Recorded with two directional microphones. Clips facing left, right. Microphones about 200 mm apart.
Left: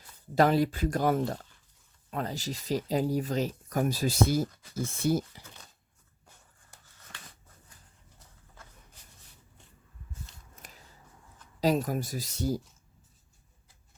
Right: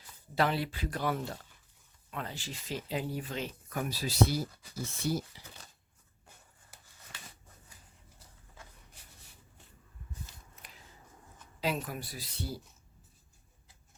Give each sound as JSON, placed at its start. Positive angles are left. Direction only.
{"t": 0.3, "sound": "speech", "side_deg": 45}
{"t": 10.5, "sound": "shuffling cards", "side_deg": 45}
{"t": 11.6, "sound": "speech", "side_deg": 40}